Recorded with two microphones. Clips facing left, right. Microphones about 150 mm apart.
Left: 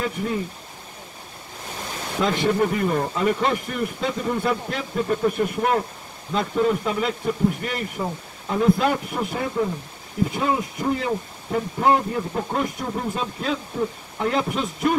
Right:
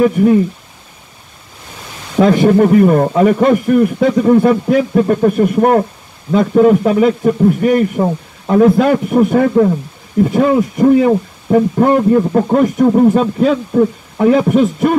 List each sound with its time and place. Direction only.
0.0 s a man's voice: 60° right (ahead or behind)
2.2 s a man's voice: 50° right (ahead or behind)